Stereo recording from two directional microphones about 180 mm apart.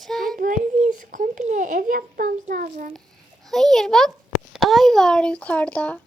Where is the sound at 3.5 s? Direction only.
Centre (ahead or behind).